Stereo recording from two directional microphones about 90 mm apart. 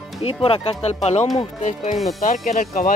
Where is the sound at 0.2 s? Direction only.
90° left.